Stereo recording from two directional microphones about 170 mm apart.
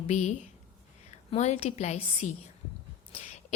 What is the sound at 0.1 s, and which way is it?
A woman's voice, 40° left (ahead or behind).